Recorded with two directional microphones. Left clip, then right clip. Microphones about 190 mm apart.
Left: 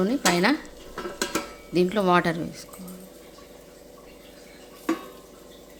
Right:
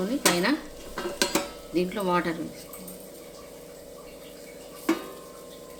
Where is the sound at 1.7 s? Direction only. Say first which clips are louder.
Left 5 dB; 65° left (ahead or behind).